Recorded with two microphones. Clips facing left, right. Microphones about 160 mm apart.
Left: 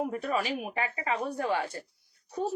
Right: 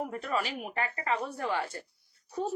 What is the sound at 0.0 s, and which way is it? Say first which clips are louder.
Speech: left 2 dB; 15° left (ahead or behind).